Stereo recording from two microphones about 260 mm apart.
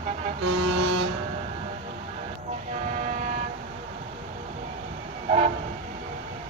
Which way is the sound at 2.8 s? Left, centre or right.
Right.